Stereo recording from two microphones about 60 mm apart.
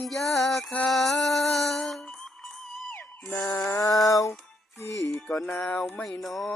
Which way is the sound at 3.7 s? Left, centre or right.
Left.